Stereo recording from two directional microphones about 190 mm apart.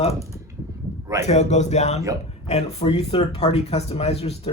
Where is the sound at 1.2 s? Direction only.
35° left (ahead or behind).